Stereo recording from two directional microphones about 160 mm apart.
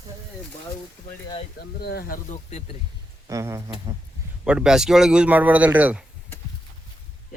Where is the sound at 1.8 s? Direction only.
90° left; by 2.4 s 60° left (ahead or behind).